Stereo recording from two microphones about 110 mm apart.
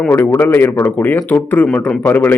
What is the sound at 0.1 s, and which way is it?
A man's voice, 25° left (ahead or behind).